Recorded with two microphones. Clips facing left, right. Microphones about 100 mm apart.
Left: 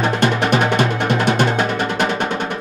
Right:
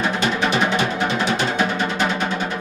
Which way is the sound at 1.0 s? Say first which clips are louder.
Left 3 dB; 55° left (ahead or behind).